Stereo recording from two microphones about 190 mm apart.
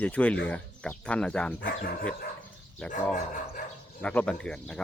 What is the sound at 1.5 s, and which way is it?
Speech, 50° left (ahead or behind).